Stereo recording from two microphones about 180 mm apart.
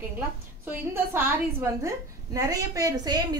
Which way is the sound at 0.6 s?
15° right (ahead or behind).